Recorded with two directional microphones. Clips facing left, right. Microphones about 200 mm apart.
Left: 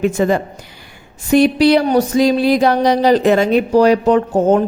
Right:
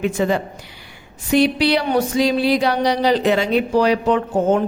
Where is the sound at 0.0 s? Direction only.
45° left (ahead or behind).